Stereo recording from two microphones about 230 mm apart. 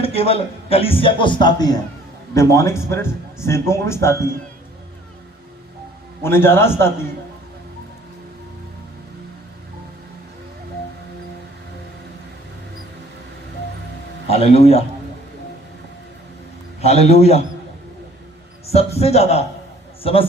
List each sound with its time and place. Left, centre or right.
0.0 s a man's voice: left
6.2 s a man's voice: centre
14.3 s speech: left
16.8 s speech: left
18.6 s a man's voice: left